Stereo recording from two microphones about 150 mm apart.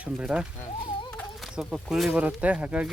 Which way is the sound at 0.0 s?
5° right (ahead or behind).